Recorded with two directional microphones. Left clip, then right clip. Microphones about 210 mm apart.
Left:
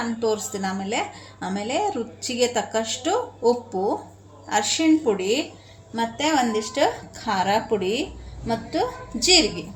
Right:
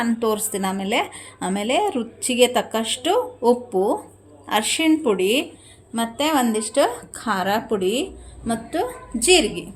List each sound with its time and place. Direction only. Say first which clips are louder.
0.2 s a woman's voice: right 2 dB; 40° right (ahead or behind)